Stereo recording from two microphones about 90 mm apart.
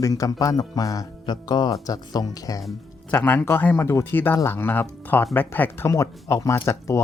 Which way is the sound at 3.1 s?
20° left (ahead or behind).